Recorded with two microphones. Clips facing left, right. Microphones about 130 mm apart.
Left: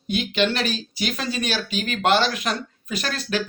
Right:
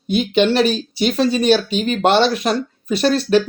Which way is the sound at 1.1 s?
35° right (ahead or behind).